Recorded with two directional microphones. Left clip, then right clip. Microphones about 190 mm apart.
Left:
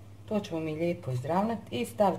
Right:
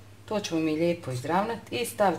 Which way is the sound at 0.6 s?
25° right (ahead or behind).